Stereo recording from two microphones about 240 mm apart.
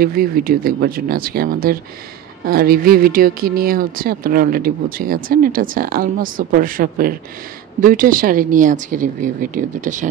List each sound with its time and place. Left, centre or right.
0.0 s speech: right